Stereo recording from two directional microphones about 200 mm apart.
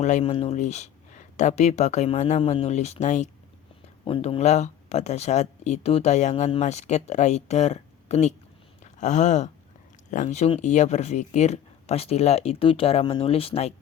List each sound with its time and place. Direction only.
0.0 s speech: 35° left (ahead or behind)
8.8 s a sound: 35° left (ahead or behind)
10.1 s speech: 35° left (ahead or behind)